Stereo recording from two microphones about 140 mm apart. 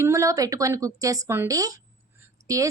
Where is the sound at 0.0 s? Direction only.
20° right (ahead or behind).